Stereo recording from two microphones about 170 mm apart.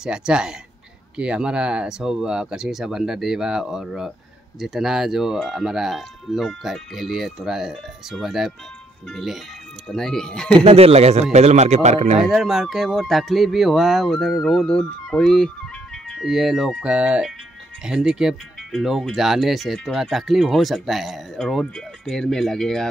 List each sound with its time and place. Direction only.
0.0 s speech: 5° right (ahead or behind)
10.5 s speech: 35° right (ahead or behind)
12.3 s speech: centre (ahead or behind)